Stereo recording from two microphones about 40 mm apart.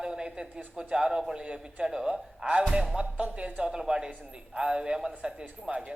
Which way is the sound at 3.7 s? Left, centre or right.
Centre.